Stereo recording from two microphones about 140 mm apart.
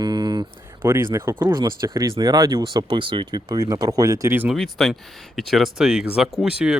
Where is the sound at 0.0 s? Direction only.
30° right (ahead or behind).